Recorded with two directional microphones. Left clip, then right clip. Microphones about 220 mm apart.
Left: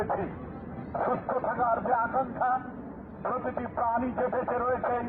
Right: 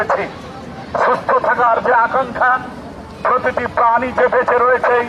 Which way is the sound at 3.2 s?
45° right (ahead or behind).